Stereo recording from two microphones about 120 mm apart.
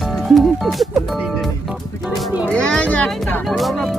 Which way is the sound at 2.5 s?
10° left (ahead or behind).